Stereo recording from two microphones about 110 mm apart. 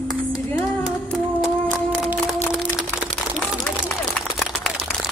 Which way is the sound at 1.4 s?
Centre (ahead or behind).